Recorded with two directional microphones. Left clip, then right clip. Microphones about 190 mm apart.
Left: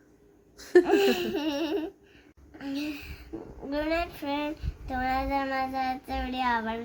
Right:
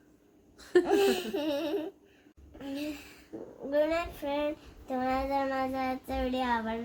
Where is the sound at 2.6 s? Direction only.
5° right (ahead or behind).